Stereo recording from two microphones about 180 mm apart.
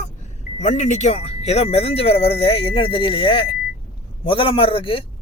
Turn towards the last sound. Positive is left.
turn(degrees=30)  # may be behind; listen again after turning